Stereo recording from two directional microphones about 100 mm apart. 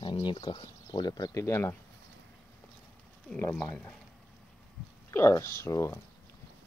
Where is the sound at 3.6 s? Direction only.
20° left (ahead or behind).